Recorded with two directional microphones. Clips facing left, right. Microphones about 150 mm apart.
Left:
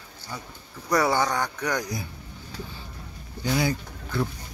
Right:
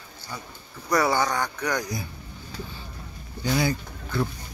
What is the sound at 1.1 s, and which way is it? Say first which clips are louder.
Speech: even; 20° left (ahead or behind).